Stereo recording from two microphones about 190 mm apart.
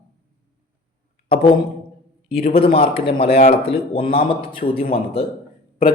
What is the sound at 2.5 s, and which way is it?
A man's voice, 30° left (ahead or behind).